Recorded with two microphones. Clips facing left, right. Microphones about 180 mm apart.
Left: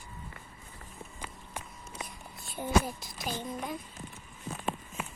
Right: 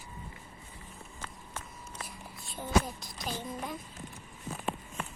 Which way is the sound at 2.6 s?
5° left (ahead or behind).